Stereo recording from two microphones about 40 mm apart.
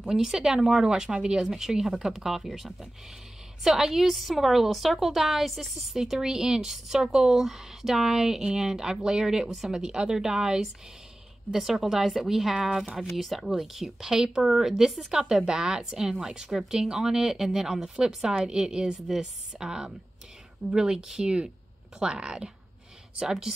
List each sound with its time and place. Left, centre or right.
0.1 s a woman's voice: centre
0.8 s a woman's voice: centre